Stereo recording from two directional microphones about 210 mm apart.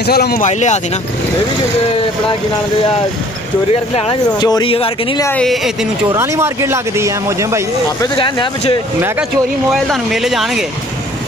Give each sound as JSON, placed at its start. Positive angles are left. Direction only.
{"t": 0.0, "sound": "speech", "side_deg": 50}
{"t": 3.7, "sound": "speech", "side_deg": 25}
{"t": 5.2, "sound": "speech", "side_deg": 5}
{"t": 6.0, "sound": "speech", "side_deg": -15}
{"t": 8.0, "sound": "speech", "side_deg": 25}
{"t": 9.8, "sound": "speech", "side_deg": 0}